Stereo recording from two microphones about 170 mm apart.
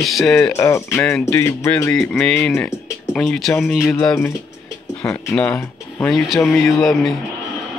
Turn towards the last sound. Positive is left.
turn(degrees=0)  # may be behind; listen again after turning